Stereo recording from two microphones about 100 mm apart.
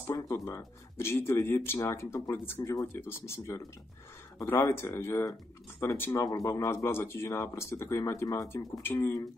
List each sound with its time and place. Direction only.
0.1 s speech: 30° left (ahead or behind)